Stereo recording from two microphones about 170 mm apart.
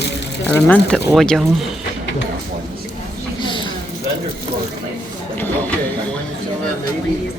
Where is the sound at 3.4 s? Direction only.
30° left (ahead or behind).